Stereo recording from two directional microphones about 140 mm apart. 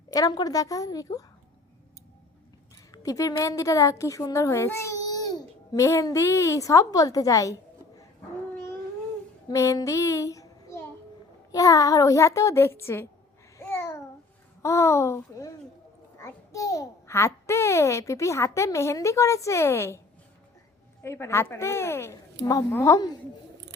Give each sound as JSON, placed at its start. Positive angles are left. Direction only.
{"t": 0.1, "sound": "a child's voice", "side_deg": 30}
{"t": 2.9, "sound": "a woman's voice", "side_deg": 25}
{"t": 9.5, "sound": "child singing", "side_deg": 20}
{"t": 11.5, "sound": "a child's voice", "side_deg": 25}
{"t": 13.7, "sound": "babbling", "side_deg": 15}
{"t": 14.6, "sound": "a child's voice", "side_deg": 20}
{"t": 21.0, "sound": "a child's voice", "side_deg": 20}